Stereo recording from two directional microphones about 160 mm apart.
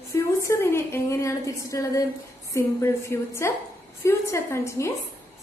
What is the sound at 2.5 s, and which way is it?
A woman's voice, 15° left (ahead or behind).